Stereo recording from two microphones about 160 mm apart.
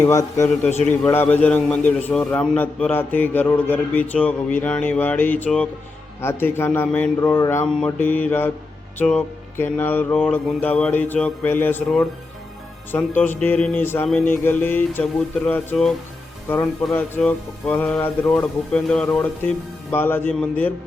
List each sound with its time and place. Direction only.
0.0 s a man's voice: 20° left (ahead or behind)
16.9 s a man's voice: 10° left (ahead or behind)